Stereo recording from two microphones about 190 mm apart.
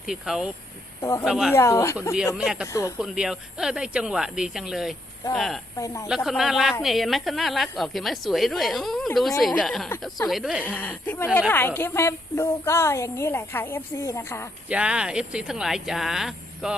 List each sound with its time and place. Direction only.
0.0 s a woman's voice: centre (ahead or behind)
1.5 s a woman's voice: 15° left (ahead or behind)
2.1 s a woman's voice: centre (ahead or behind)
5.7 s a woman's voice: 15° left (ahead or behind)
6.1 s a woman's voice: centre (ahead or behind)
10.8 s a woman's voice: 10° left (ahead or behind)
14.7 s a woman's voice: 5° right (ahead or behind)